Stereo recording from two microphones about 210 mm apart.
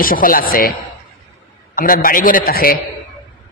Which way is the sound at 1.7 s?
40° left (ahead or behind).